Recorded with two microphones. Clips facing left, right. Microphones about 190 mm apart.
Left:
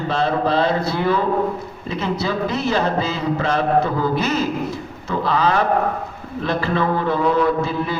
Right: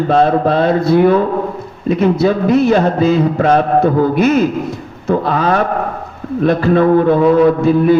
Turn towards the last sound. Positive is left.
turn(degrees=-55)  # may be behind; listen again after turning